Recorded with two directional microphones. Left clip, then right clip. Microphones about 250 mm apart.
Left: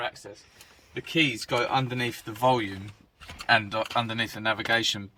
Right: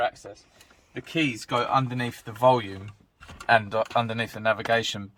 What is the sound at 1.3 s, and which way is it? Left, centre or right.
Speech, right.